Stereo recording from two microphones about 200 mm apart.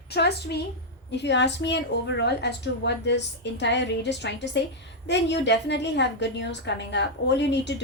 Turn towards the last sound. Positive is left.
turn(degrees=60)  # may be behind; listen again after turning